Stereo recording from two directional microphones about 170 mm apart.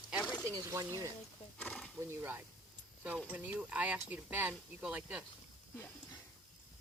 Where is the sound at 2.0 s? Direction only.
15° right (ahead or behind).